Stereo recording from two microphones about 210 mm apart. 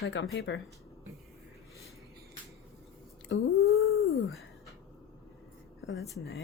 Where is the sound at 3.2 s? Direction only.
70° left (ahead or behind).